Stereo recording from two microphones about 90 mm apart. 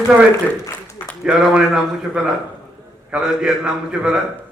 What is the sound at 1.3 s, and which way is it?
A man's voice, 10° right (ahead or behind).